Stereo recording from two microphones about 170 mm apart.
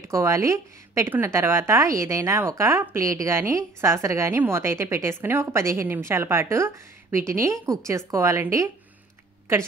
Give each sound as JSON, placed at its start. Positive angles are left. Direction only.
{"t": 0.1, "sound": "a woman's voice", "side_deg": -15}